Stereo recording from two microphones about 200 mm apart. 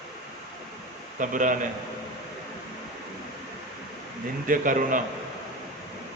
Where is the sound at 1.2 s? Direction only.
40° right (ahead or behind).